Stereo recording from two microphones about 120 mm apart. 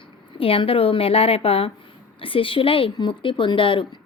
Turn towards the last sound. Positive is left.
turn(degrees=45)  # may be behind; listen again after turning